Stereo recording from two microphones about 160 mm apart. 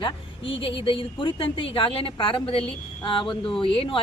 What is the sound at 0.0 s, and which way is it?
A woman's voice, 35° left (ahead or behind).